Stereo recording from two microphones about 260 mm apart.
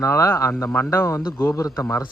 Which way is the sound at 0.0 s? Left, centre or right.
Centre.